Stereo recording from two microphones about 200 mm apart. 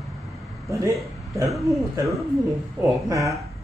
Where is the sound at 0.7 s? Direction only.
15° right (ahead or behind).